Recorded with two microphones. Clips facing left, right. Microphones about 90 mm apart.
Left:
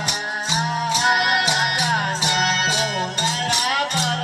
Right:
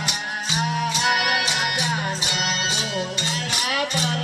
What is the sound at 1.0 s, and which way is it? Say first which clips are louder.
Music: left 4 dB; 35° left (ahead or behind).